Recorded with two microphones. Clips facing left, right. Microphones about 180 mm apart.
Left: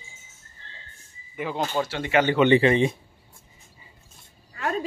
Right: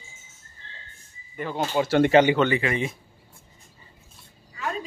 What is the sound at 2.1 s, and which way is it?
Speech, 30° right (ahead or behind).